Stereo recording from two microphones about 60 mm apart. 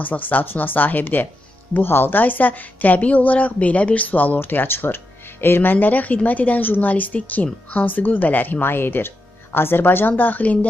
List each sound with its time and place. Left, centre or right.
0.0 s speech: left